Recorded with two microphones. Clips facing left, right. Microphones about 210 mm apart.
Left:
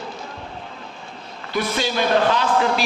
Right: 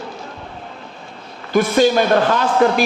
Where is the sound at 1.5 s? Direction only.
50° right (ahead or behind).